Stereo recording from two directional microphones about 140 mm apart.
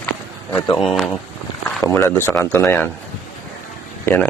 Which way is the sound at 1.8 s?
15° left (ahead or behind).